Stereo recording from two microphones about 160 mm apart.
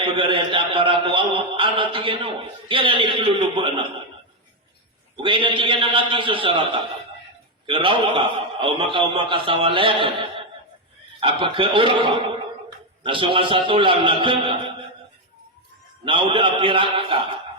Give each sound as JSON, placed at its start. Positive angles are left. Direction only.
{"t": 0.0, "sound": "a man's voice", "side_deg": -35}
{"t": 5.1, "sound": "a man's voice", "side_deg": -30}
{"t": 16.0, "sound": "a man's voice", "side_deg": -35}